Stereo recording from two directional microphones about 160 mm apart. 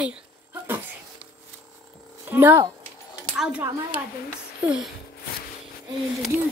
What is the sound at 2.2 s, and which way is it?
Speech, 15° right (ahead or behind).